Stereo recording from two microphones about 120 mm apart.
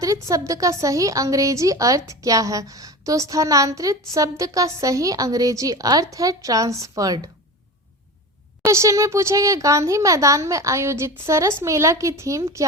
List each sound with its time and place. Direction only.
0.0 s a woman's voice: 25° right (ahead or behind)
8.6 s a woman's voice: 25° right (ahead or behind)